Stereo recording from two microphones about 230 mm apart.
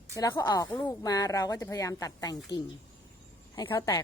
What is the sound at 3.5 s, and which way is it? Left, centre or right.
Speech, centre.